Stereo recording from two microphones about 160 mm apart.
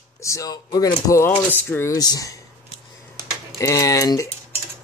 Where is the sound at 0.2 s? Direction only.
20° left (ahead or behind).